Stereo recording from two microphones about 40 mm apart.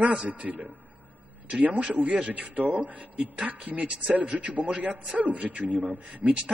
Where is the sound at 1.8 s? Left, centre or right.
Right.